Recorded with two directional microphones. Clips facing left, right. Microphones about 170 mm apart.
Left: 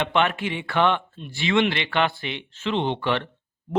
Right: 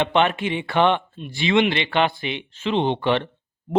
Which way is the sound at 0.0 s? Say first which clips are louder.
Right 3 dB; 20° right (ahead or behind).